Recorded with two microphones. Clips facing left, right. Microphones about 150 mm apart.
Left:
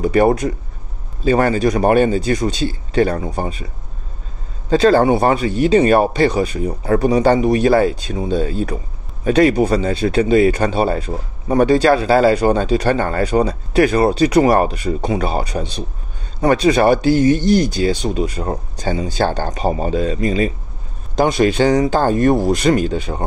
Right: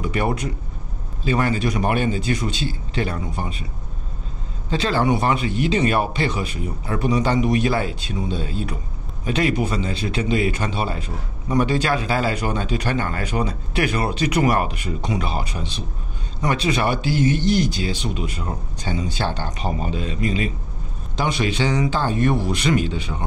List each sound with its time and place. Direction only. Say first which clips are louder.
0.0 s a man's voice: left 9 dB; 40° left (ahead or behind)
4.6 s a man's voice: left 8 dB; 45° left (ahead or behind)